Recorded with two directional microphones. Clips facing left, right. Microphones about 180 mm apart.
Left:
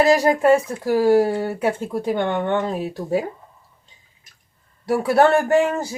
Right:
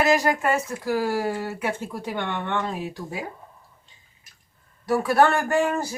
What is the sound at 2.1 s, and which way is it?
Speech, 40° left (ahead or behind).